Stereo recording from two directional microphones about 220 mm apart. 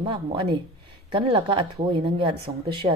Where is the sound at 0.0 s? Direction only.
25° right (ahead or behind).